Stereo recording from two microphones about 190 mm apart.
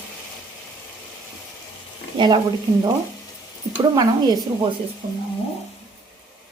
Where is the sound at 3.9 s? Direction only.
20° right (ahead or behind).